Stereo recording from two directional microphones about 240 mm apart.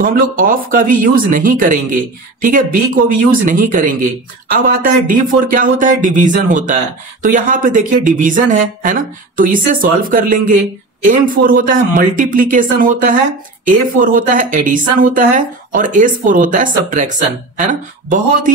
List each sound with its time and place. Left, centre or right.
0.0 s speech: right